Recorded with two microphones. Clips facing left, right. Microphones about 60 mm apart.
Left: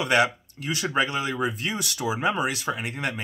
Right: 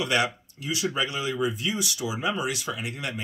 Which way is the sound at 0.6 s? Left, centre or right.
Left.